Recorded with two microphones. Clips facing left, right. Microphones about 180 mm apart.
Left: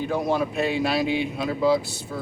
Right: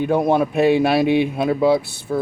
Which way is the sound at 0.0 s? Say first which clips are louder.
Right 7 dB; 60° right (ahead or behind).